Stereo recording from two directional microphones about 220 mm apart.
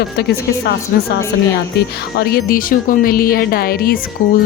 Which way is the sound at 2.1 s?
45° left (ahead or behind).